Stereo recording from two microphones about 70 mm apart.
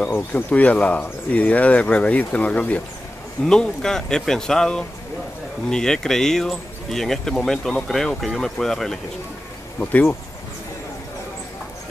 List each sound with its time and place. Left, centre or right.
0.1 s speech: left; by 9.0 s centre
9.8 s speech: left